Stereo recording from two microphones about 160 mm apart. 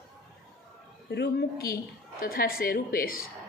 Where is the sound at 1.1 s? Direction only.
80° left; by 3.3 s 65° left (ahead or behind).